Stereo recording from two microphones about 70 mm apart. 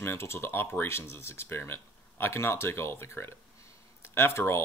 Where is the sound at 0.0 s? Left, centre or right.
Left.